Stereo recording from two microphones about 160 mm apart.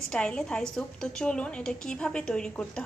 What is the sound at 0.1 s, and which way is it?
A woman's voice, 5° left (ahead or behind).